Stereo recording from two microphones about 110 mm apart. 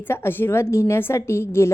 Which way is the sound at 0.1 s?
20° left (ahead or behind).